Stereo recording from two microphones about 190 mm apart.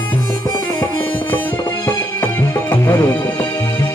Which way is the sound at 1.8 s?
10° left (ahead or behind).